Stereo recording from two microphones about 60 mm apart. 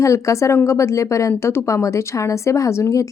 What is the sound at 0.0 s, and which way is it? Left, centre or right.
A woman's voice, left.